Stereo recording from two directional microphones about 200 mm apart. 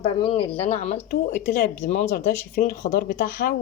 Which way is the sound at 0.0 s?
25° left (ahead or behind).